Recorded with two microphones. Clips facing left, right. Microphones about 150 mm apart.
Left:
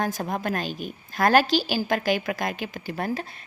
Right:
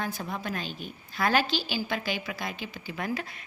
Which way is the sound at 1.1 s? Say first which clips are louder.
Left 7 dB; 45° left (ahead or behind).